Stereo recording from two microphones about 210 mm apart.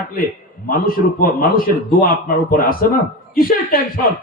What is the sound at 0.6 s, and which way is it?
A man's voice, 45° left (ahead or behind).